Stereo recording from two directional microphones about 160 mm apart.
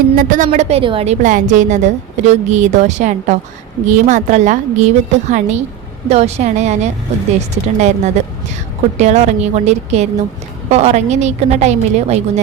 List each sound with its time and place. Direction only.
0.2 s a woman's voice: 55° right (ahead or behind)